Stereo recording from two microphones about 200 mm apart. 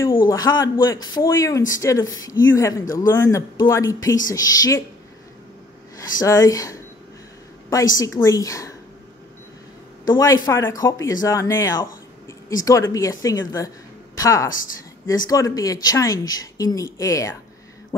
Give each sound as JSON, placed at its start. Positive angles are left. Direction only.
{"t": 0.3, "sound": "a man's voice", "side_deg": 20}
{"t": 6.2, "sound": "a man's voice", "side_deg": 15}
{"t": 10.0, "sound": "a man's voice", "side_deg": 20}